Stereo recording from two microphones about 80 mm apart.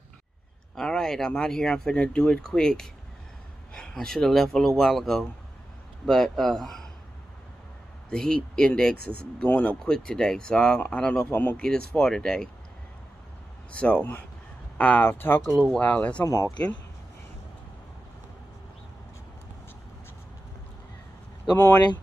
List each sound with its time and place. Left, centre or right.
0.7 s speech: centre
8.1 s speech: centre
9.9 s speech: centre
11.2 s speech: left
11.6 s speech: centre
13.7 s speech: centre
15.7 s speech: centre
16.3 s speech: left